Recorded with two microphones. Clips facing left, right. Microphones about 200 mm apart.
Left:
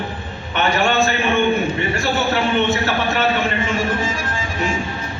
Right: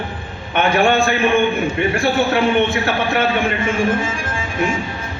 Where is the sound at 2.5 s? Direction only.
55° right (ahead or behind).